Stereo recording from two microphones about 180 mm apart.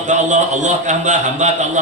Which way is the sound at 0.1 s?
40° right (ahead or behind).